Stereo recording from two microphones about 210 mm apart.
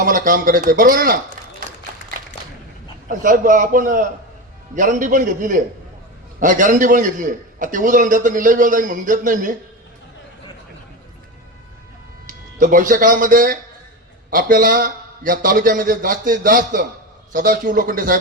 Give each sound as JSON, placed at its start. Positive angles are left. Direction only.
{"t": 0.0, "sound": "a man's voice", "side_deg": -40}
{"t": 3.1, "sound": "a man's voice", "side_deg": -40}
{"t": 12.3, "sound": "a man's voice", "side_deg": -40}